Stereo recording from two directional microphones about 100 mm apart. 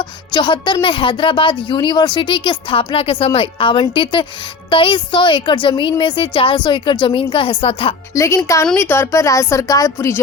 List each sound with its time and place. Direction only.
0.3 s a woman's voice: 50° left (ahead or behind); by 7.9 s 65° left (ahead or behind)
8.1 s a woman's voice: 30° left (ahead or behind)